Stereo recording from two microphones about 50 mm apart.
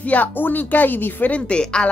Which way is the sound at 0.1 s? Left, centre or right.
Left.